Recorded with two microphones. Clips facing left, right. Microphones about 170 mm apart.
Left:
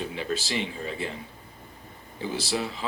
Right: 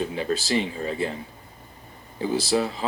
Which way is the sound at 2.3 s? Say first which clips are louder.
Right 7 dB; 40° right (ahead or behind).